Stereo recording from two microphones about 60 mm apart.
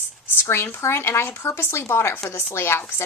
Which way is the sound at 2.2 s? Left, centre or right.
Left.